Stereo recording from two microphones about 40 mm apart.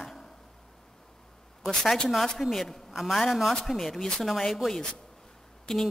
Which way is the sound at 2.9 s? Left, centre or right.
Centre.